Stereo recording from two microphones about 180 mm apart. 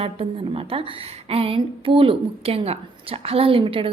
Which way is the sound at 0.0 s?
30° right (ahead or behind).